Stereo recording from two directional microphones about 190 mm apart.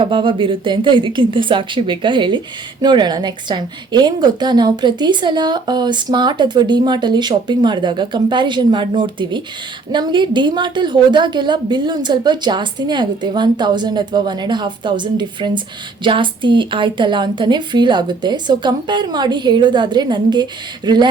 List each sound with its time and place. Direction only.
0.0 s a woman's voice: 25° right (ahead or behind)